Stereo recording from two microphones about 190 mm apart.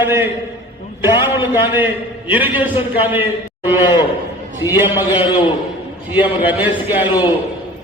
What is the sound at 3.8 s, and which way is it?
Speech, 20° left (ahead or behind).